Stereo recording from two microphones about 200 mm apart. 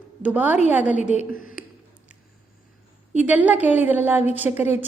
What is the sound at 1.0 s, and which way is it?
Speech, 35° left (ahead or behind).